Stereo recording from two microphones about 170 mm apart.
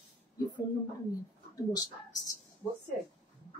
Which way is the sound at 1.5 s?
20° left (ahead or behind).